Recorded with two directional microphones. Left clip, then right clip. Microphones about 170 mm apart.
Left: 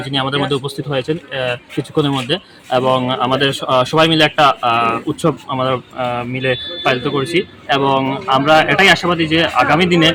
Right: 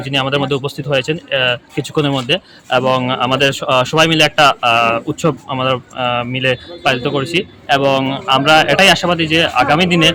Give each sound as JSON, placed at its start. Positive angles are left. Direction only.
{"t": 0.0, "sound": "speech", "side_deg": -35}